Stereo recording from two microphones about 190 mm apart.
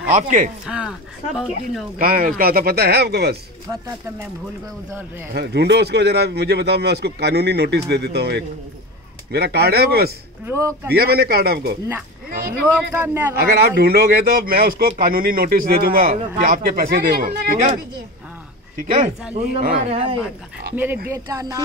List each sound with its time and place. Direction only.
0.1 s speech: 40° right (ahead or behind)
0.7 s speech: 5° right (ahead or behind)
2.0 s a man's voice: 50° right (ahead or behind)
3.6 s speech: 15° right (ahead or behind)
5.3 s speech: 60° right (ahead or behind)
10.4 s speech: 15° right (ahead or behind)
10.9 s a man's voice: 55° right (ahead or behind)
12.9 s speech: 10° right (ahead or behind)
13.4 s a man's voice: 55° right (ahead or behind)
19.3 s speech: 35° right (ahead or behind)
20.7 s speech: 10° right (ahead or behind)